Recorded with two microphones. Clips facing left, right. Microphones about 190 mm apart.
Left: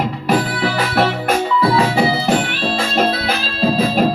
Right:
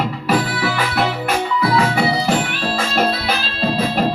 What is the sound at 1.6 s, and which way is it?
Music, 30° left (ahead or behind).